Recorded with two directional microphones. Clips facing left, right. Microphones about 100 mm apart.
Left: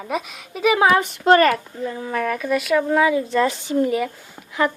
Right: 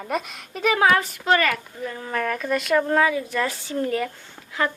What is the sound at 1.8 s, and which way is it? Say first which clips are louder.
Speech: left 4 dB; 15° left (ahead or behind).